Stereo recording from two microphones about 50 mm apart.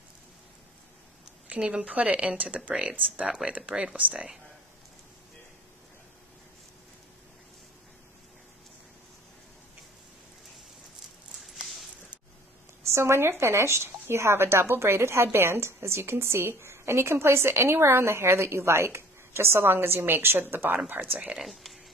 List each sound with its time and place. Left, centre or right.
1.8 s speech: right
3.3 s speech: centre
11.4 s a sound: centre
12.8 s speech: right
20.8 s speech: right
21.4 s speech: centre